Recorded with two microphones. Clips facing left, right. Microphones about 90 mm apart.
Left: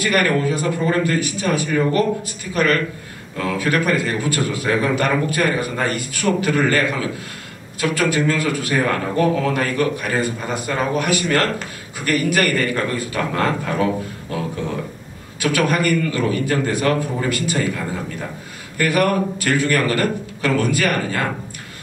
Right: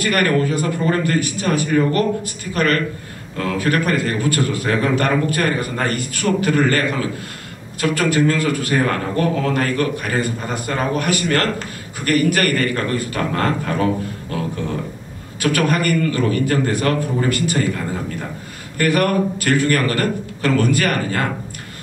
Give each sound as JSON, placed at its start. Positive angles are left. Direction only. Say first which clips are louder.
{"t": 0.0, "sound": "a man's voice", "louder": "right 1 dB", "side_deg": -45}
{"t": 15.4, "sound": "a man's voice", "louder": "even", "side_deg": -50}
{"t": 18.8, "sound": "a man's voice", "louder": "right 1 dB", "side_deg": -45}